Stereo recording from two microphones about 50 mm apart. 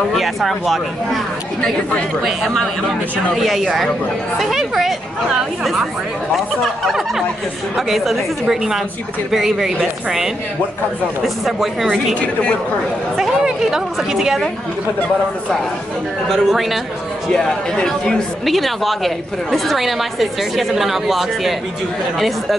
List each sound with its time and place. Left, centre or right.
0.1 s a woman's voice: centre
3.3 s a woman's voice: centre
12.2 s a woman's voice: left
13.2 s a woman's voice: centre
16.3 s a woman's voice: centre
17.3 s speech: centre
18.4 s a woman's voice: centre